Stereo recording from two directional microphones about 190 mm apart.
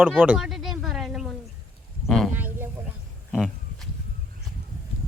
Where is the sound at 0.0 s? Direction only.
10° right (ahead or behind).